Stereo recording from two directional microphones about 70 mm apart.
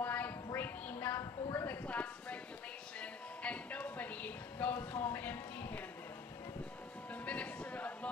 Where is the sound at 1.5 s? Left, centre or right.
Left.